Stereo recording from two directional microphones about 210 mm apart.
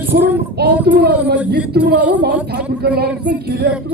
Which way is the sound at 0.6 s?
50° right (ahead or behind).